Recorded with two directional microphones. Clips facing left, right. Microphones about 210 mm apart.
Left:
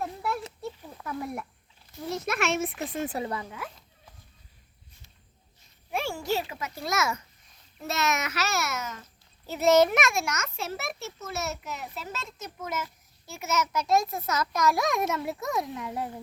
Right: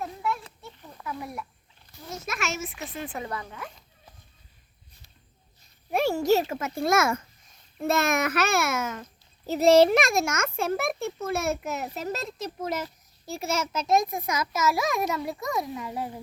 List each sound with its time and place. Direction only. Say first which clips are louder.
1.0 s a sound: right 1 dB; centre (ahead or behind)
2.2 s speech: left 4 dB; 60° left (ahead or behind)
3.3 s speech: left 1 dB; 5° left (ahead or behind)
5.9 s a child's voice: right 7 dB; 40° right (ahead or behind)
9.5 s a child's voice: right 3 dB; 35° right (ahead or behind); by 16.0 s centre (ahead or behind)